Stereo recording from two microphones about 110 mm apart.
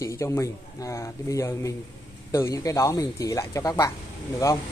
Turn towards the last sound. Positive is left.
turn(degrees=30)  # may be behind; listen again after turning